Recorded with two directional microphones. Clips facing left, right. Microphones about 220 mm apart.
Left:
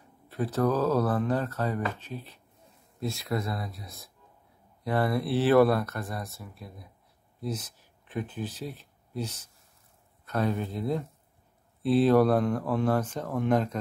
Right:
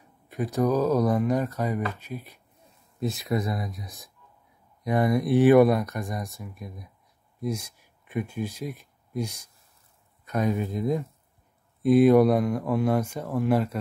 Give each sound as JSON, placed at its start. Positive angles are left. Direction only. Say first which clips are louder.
{"t": 0.3, "sound": "speech", "louder": "right 2 dB", "side_deg": -15}